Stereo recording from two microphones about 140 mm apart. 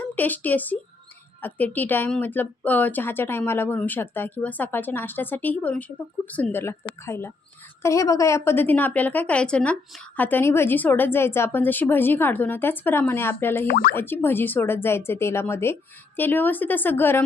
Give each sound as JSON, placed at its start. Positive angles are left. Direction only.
{"t": 0.0, "sound": "a woman's voice", "side_deg": 10}
{"t": 13.7, "sound": "speech", "side_deg": 90}
{"t": 13.9, "sound": "a woman's voice", "side_deg": 15}